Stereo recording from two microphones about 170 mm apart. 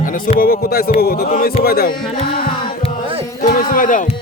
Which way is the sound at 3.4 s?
55° left (ahead or behind).